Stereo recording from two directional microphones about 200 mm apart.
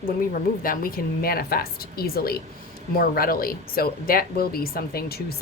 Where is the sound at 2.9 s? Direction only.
50° left (ahead or behind).